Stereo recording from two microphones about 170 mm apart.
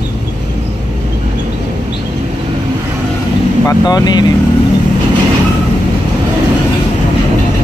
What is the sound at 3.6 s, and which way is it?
Speech, 25° left (ahead or behind).